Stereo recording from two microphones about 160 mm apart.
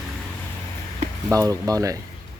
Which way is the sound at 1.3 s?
20° right (ahead or behind).